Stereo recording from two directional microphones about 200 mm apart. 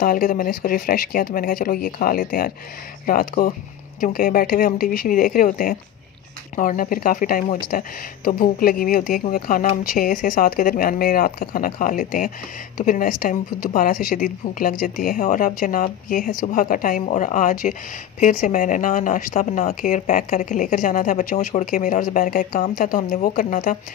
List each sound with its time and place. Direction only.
0.0 s a woman's voice: 40° left (ahead or behind)